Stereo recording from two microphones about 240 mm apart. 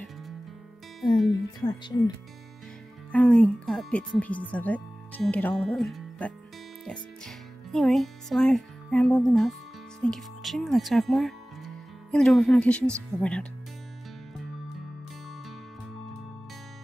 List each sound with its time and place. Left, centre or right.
1.6 s speech: centre
3.1 s speech: centre